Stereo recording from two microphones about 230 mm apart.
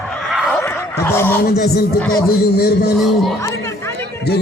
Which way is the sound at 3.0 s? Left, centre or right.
Centre.